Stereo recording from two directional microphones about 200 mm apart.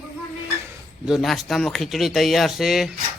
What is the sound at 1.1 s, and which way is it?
Speech, centre (ahead or behind).